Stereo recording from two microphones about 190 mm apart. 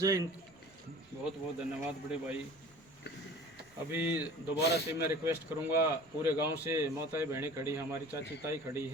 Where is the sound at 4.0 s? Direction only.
10° right (ahead or behind).